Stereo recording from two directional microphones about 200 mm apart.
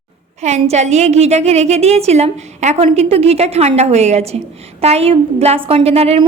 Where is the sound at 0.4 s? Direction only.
35° right (ahead or behind).